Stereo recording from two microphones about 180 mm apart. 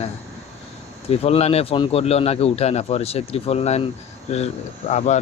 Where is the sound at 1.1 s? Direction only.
35° left (ahead or behind).